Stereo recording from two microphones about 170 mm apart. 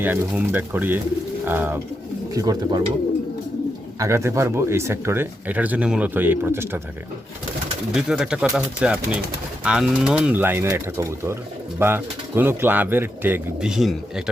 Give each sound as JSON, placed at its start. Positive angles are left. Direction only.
{"t": 0.0, "sound": "speech", "side_deg": -10}
{"t": 3.9, "sound": "speech", "side_deg": -15}
{"t": 7.9, "sound": "speech", "side_deg": -5}